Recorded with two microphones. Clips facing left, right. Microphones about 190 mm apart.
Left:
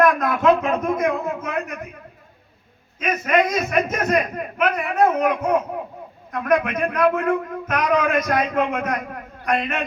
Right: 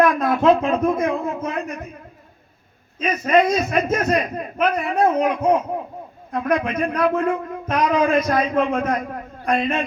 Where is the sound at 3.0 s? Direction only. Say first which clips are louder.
Right 2 dB; 30° right (ahead or behind).